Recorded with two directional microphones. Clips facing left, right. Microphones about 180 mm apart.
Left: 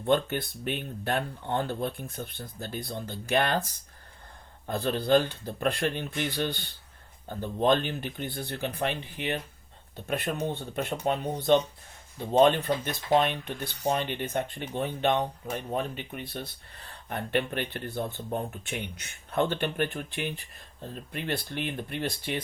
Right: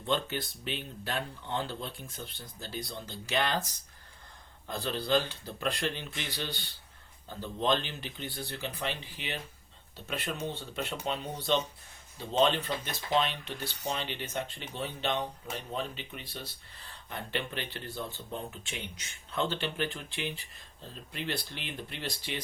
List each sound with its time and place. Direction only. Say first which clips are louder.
0.0 s speech: left 6 dB; 55° left (ahead or behind)